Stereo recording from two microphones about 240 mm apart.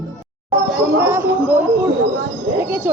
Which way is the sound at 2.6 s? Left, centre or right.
Centre.